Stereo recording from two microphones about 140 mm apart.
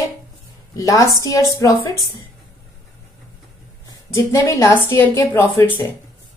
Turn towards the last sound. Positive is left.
turn(degrees=15)  # may be behind; listen again after turning